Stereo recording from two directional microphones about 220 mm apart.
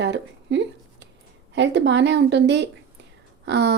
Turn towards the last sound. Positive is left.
turn(degrees=-50)  # may be behind; listen again after turning